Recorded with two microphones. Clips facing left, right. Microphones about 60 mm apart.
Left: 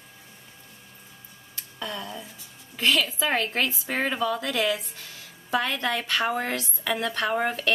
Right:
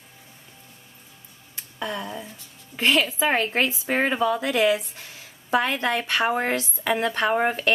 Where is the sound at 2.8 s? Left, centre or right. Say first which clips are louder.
Right 3 dB; right.